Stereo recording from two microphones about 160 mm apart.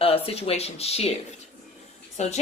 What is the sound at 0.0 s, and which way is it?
Speech, 35° left (ahead or behind).